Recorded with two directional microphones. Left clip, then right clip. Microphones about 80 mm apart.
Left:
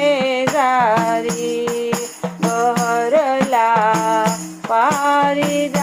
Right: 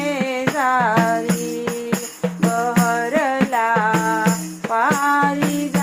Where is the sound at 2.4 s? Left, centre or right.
Left.